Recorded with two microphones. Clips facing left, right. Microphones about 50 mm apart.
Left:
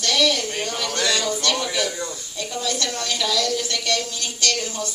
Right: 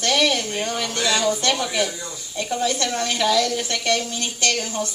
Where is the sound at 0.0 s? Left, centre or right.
Right.